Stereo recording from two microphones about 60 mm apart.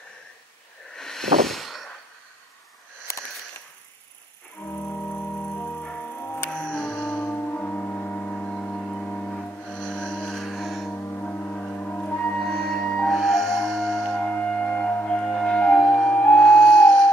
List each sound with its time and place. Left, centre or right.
0.9 s vehicle: centre
4.6 s music: left
6.2 s music: left
6.5 s music: centre
7.6 s music: left; by 10.9 s centre
10.9 s music: left
12.4 s music: centre
12.8 s music: centre
13.1 s music: centre
14.2 s music: left
16.4 s music: centre